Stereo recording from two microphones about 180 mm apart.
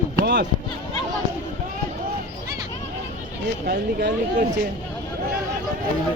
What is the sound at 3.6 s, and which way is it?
Speech, 55° right (ahead or behind).